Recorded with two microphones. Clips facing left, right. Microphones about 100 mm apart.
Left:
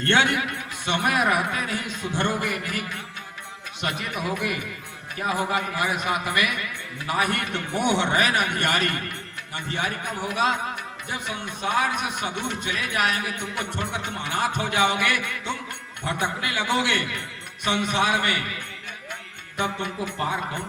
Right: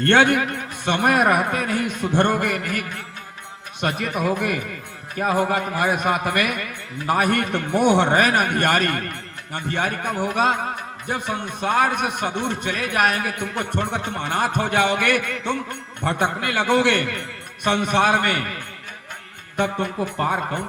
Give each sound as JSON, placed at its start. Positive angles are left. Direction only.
{"t": 0.0, "sound": "a man's voice", "side_deg": -50}
{"t": 19.5, "sound": "a man's voice", "side_deg": -50}